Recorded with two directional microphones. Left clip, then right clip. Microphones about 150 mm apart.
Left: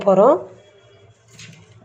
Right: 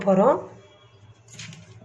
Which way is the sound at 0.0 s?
30° left (ahead or behind).